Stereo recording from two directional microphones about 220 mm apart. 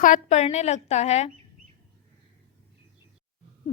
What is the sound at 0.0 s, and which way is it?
A woman's voice, 35° left (ahead or behind).